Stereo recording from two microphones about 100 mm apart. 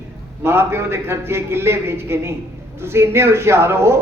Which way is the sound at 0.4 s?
25° right (ahead or behind).